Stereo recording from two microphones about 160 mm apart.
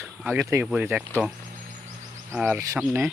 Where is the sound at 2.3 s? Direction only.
10° right (ahead or behind).